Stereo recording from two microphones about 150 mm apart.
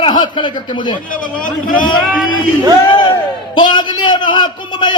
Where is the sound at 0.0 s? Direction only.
30° left (ahead or behind).